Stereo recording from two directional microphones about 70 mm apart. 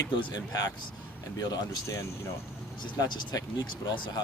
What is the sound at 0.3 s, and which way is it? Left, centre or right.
Speech, left.